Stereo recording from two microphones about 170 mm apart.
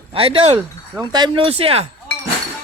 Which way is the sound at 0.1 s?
35° right (ahead or behind).